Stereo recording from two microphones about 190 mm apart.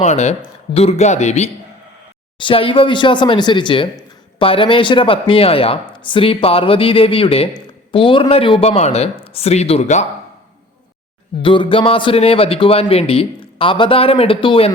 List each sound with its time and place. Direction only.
0.0 s speech: 35° left (ahead or behind)
11.4 s speech: 25° left (ahead or behind)